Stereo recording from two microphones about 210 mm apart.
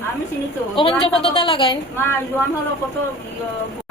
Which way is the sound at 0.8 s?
25° left (ahead or behind).